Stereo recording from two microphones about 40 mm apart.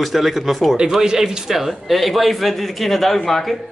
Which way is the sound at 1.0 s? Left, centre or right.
Centre.